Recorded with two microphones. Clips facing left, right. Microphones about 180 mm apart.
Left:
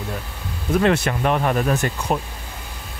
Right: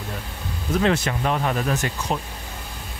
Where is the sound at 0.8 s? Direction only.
60° left (ahead or behind).